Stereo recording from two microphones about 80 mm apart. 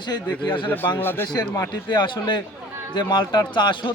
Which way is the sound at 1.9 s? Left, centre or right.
Left.